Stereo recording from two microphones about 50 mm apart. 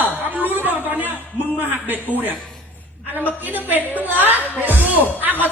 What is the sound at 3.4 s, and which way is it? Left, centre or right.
Speech, right.